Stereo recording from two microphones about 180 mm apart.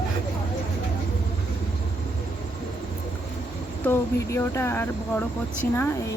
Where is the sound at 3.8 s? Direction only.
15° left (ahead or behind).